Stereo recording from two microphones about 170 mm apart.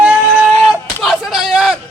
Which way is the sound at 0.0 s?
10° right (ahead or behind).